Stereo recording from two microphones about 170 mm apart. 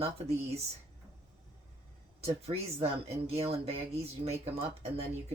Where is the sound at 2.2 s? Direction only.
35° right (ahead or behind).